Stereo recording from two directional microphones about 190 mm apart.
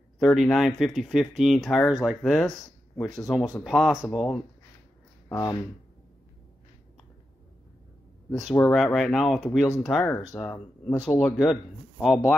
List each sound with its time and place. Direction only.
0.2 s speech: centre (ahead or behind)
5.3 s speech: 20° left (ahead or behind)
8.6 s speech: centre (ahead or behind)
10.0 s speech: 15° left (ahead or behind)
10.3 s speech: 5° left (ahead or behind)